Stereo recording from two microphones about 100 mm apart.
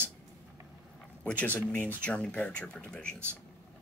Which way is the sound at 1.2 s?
15° left (ahead or behind).